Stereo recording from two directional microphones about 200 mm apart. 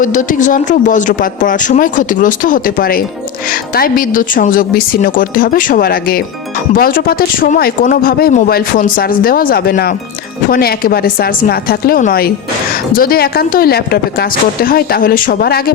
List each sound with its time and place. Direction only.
0.0 s speech: 40° left (ahead or behind)